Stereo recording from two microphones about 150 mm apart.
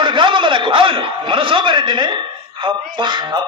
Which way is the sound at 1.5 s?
35° right (ahead or behind).